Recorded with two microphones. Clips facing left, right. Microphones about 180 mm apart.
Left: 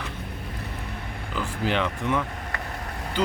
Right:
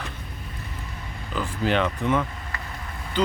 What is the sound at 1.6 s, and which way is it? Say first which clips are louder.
Speech: right 3 dB; 15° left (ahead or behind).